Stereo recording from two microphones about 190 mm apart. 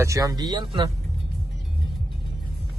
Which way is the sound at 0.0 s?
15° right (ahead or behind).